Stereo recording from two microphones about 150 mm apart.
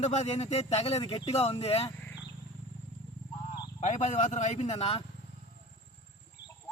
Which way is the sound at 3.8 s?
55° left (ahead or behind).